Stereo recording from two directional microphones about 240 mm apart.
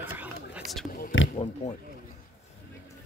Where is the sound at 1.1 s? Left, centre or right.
Left.